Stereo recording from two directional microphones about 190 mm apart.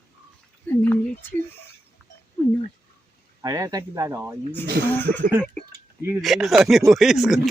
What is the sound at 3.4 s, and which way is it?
Speech, 20° right (ahead or behind).